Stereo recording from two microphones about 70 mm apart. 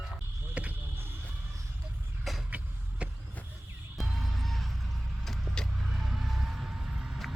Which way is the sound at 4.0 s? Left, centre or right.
Centre.